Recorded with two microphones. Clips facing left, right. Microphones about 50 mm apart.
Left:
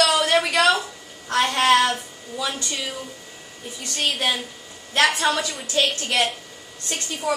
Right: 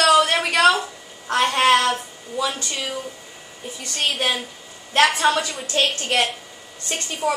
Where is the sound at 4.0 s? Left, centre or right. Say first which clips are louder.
Right 1 dB; centre.